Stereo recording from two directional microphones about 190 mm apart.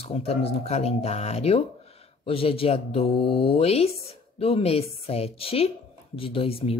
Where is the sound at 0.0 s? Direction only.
30° left (ahead or behind).